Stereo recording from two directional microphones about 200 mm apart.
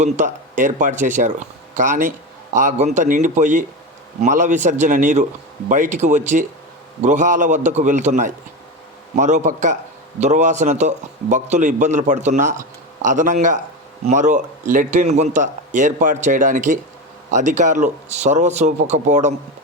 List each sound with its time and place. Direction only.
0.0 s speech: 40° right (ahead or behind)